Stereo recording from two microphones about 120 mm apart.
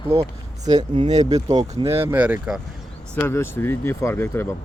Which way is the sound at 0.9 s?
60° right (ahead or behind).